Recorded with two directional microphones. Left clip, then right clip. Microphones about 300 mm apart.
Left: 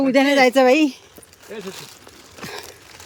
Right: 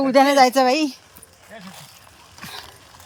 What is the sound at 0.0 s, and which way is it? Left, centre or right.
Speech, centre.